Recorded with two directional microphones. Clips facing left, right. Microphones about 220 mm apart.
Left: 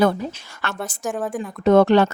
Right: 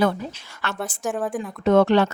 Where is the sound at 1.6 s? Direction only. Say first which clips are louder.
Left 3 dB; 40° left (ahead or behind).